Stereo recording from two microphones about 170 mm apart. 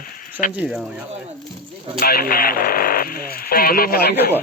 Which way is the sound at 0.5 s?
5° right (ahead or behind).